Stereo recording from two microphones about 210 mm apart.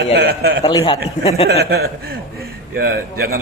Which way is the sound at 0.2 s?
45° right (ahead or behind).